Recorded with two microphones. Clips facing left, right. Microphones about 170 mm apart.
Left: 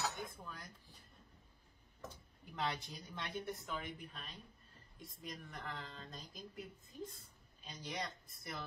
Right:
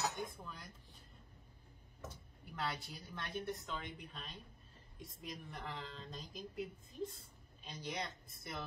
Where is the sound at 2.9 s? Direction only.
15° left (ahead or behind).